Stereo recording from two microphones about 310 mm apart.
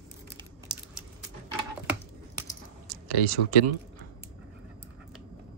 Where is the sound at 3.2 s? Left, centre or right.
Right.